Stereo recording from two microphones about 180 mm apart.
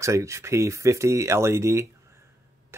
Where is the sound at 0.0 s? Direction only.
15° right (ahead or behind).